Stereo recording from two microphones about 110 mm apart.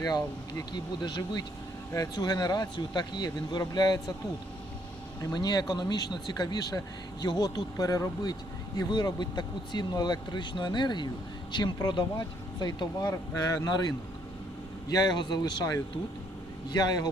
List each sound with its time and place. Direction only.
0.0 s speech: 35° left (ahead or behind)
5.2 s speech: 40° left (ahead or behind)